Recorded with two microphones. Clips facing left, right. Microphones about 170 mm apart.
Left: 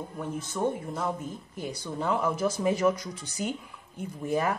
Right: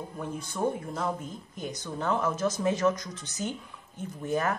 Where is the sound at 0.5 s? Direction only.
Centre (ahead or behind).